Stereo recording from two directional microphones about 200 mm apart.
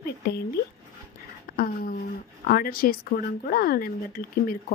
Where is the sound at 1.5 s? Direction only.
45° left (ahead or behind).